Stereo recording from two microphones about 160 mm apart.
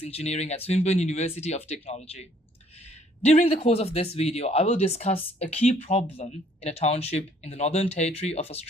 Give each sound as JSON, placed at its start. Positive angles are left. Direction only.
{"t": 0.0, "sound": "speech", "side_deg": 40}
{"t": 3.2, "sound": "speech", "side_deg": 40}